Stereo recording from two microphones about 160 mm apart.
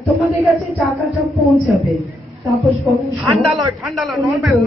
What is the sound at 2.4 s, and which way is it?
A man's voice, centre (ahead or behind).